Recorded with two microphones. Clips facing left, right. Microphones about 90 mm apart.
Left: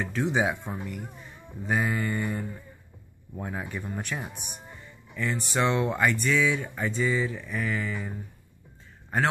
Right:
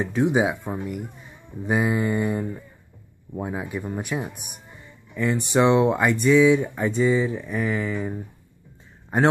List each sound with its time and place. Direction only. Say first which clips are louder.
0.0 s speech: right 5 dB; 15° right (ahead or behind)